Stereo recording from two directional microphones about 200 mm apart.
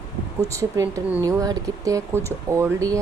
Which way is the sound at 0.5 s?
15° right (ahead or behind).